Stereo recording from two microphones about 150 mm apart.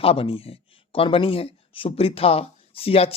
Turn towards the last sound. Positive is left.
turn(degrees=40)  # may be behind; listen again after turning